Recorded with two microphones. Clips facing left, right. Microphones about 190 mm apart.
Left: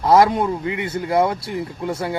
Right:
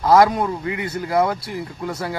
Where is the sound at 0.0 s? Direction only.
25° left (ahead or behind).